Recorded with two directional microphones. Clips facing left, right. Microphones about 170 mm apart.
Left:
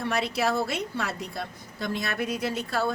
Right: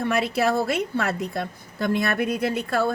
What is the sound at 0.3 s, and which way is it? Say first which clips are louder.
A woman's voice: right 5 dB; 55° right (ahead or behind).